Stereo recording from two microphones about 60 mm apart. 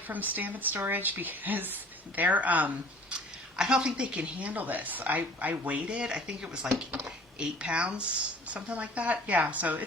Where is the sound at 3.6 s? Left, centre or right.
Centre.